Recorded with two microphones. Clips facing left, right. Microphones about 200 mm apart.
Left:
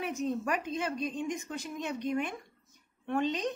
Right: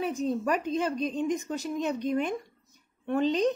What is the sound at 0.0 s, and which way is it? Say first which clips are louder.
A woman's voice: right 4 dB; 30° right (ahead or behind).